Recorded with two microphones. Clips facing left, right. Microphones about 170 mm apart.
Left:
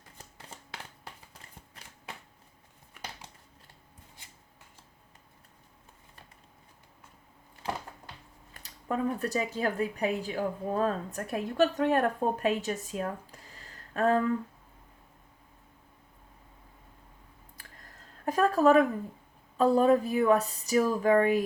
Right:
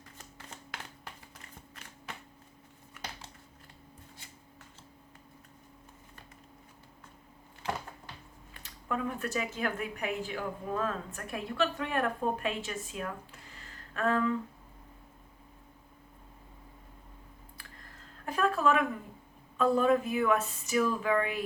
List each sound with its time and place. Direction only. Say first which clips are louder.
8.5 s speech: left 3 dB; 35° left (ahead or behind)
17.6 s a sound: left 1 dB; 40° left (ahead or behind)
19.5 s speech: left 3 dB; 35° left (ahead or behind)